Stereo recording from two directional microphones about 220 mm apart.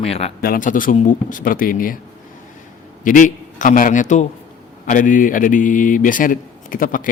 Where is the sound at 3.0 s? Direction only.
35° left (ahead or behind).